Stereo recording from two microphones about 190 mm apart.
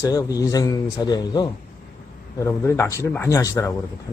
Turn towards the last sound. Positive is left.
turn(degrees=15)  # may be behind; listen again after turning